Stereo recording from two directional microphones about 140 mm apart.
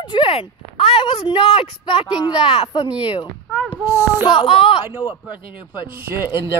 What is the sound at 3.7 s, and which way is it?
Child singing, 15° right (ahead or behind).